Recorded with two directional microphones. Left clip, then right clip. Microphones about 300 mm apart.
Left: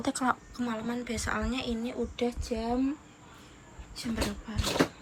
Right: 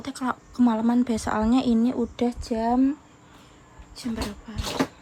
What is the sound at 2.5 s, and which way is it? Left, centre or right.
Speech, right.